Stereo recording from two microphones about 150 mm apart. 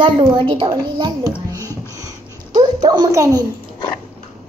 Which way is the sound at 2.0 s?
25° right (ahead or behind).